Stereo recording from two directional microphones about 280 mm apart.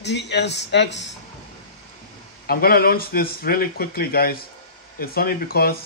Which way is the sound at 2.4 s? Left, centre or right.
Left.